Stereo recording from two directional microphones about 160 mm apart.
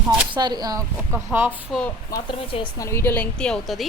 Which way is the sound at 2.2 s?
30° left (ahead or behind).